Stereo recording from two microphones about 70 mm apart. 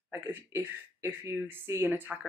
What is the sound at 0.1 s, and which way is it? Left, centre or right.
Speech, right.